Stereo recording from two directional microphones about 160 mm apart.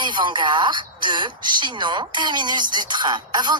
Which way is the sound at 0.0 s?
30° right (ahead or behind).